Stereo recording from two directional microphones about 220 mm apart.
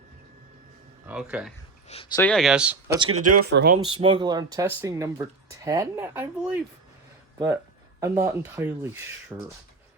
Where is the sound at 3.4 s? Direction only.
45° right (ahead or behind).